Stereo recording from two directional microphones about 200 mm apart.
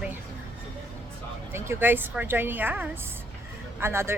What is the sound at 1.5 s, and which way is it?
Speech, 10° right (ahead or behind).